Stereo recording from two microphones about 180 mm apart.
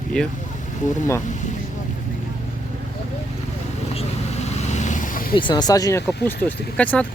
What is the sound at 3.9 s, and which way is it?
Vehicle, 35° left (ahead or behind).